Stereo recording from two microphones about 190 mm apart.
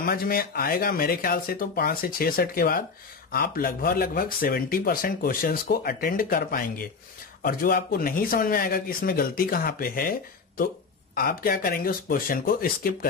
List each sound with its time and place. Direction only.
0.0 s speech: 50° left (ahead or behind)
11.1 s speech: 50° left (ahead or behind)